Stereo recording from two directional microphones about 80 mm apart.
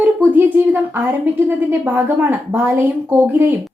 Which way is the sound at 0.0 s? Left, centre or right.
Right.